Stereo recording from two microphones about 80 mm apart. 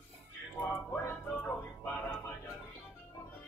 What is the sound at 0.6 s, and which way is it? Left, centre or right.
Music, left.